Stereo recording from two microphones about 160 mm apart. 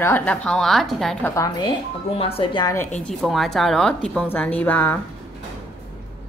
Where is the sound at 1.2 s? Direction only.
20° left (ahead or behind).